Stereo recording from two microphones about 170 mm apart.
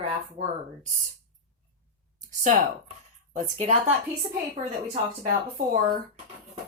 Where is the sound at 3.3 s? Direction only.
45° right (ahead or behind).